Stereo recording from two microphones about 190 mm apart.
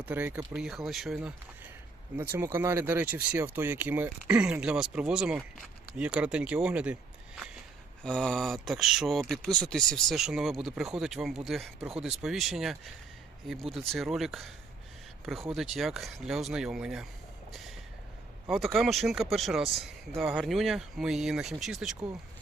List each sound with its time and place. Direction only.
0.0 s speech: 10° right (ahead or behind)
2.1 s speech: 10° right (ahead or behind)
18.4 s speech: centre (ahead or behind)